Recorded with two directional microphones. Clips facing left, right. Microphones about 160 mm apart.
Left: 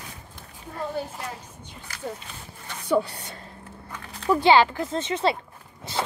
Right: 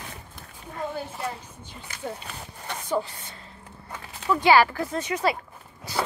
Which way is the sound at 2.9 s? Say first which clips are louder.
Left 5 dB; 70° left (ahead or behind).